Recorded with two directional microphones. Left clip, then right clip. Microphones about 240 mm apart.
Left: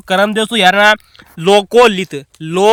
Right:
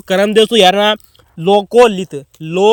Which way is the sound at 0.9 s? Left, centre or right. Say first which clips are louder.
Left 1 dB; left.